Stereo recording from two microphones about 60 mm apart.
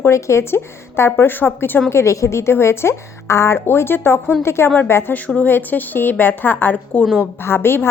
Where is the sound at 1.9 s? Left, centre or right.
Left.